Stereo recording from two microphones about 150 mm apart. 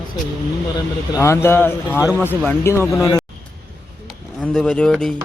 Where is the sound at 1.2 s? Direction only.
20° left (ahead or behind).